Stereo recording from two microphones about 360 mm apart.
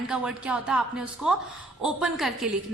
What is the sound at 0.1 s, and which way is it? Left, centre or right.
A woman's voice, centre.